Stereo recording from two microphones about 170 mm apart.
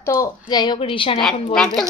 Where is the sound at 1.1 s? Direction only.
Centre (ahead or behind).